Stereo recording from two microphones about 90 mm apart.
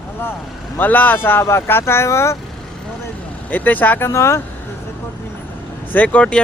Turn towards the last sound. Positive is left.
turn(degrees=15)  # may be behind; listen again after turning